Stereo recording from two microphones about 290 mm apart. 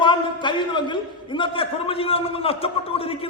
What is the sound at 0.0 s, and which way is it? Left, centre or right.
A man's voice, centre.